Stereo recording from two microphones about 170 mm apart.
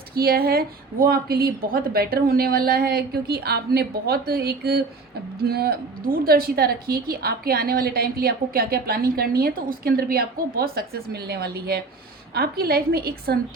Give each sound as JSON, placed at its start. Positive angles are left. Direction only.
{"t": 0.1, "sound": "a woman's voice", "side_deg": -65}